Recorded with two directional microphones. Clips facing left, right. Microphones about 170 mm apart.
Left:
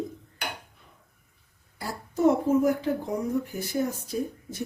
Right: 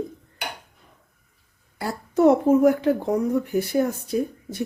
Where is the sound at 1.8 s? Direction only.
65° right (ahead or behind).